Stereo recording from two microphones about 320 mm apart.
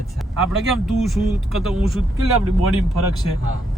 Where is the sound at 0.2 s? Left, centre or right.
Centre.